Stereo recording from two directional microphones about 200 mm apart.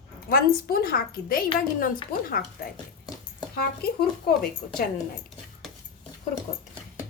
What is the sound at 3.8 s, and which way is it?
Speech, 50° left (ahead or behind).